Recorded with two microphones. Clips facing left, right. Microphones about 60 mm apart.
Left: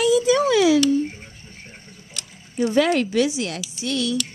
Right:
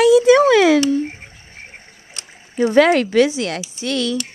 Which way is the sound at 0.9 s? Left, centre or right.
Right.